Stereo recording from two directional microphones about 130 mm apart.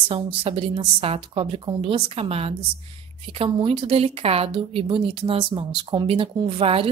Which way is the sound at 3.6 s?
50° right (ahead or behind).